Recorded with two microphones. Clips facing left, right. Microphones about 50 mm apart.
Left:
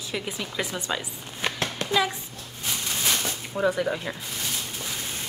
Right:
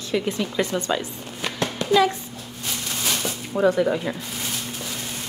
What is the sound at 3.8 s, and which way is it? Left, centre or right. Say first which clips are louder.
Speech: right 5 dB; centre.